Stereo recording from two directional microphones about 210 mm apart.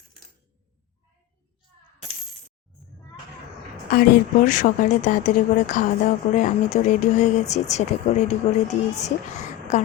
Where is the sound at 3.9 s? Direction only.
40° left (ahead or behind).